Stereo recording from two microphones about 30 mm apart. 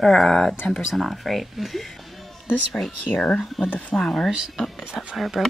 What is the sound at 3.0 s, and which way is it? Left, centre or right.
Speech, left.